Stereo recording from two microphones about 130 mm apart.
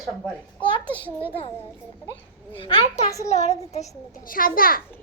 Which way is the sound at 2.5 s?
45° left (ahead or behind).